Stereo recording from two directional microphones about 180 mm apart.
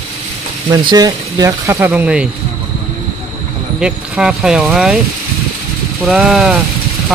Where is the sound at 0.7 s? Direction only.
20° right (ahead or behind); by 2.3 s 5° right (ahead or behind).